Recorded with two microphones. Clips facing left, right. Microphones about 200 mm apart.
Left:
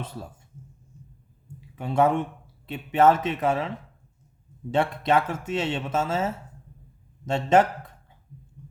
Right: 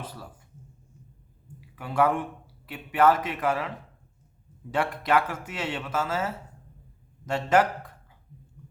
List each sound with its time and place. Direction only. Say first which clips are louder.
0.0 s speech: left 4 dB; 25° left (ahead or behind)
1.7 s speech: left 3 dB; 25° left (ahead or behind)
4.7 s speech: left 2 dB; 25° left (ahead or behind)